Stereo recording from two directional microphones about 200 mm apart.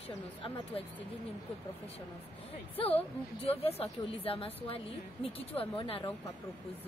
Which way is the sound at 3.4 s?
30° left (ahead or behind).